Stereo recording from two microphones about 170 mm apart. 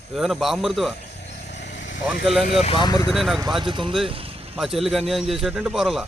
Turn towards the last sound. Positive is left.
turn(degrees=0)  # may be behind; listen again after turning